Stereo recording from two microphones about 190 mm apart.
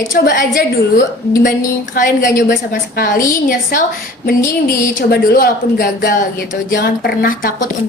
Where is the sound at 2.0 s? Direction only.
45° left (ahead or behind).